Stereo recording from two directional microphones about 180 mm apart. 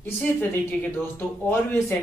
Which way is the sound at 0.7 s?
10° left (ahead or behind).